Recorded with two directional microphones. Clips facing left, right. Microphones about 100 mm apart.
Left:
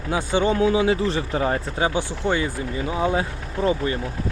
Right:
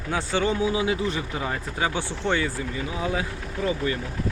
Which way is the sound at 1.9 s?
15° left (ahead or behind).